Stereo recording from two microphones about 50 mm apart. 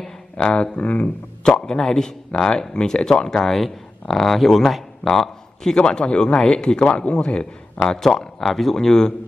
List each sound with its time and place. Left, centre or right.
0.4 s a man's voice: left
1.7 s speech: centre
5.8 s a man's voice: centre